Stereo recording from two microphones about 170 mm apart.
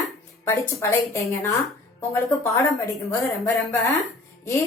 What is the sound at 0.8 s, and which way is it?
A woman's voice, 15° left (ahead or behind).